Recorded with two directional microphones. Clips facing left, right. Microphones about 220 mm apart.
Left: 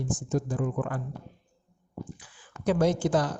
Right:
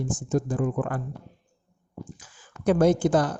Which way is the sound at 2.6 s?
55° right (ahead or behind).